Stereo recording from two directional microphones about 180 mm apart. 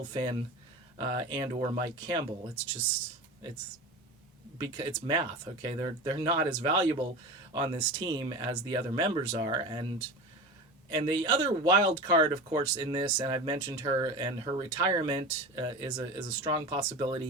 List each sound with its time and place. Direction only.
0.1 s speech: 25° right (ahead or behind)
4.8 s speech: 25° right (ahead or behind)
10.9 s speech: 20° right (ahead or behind)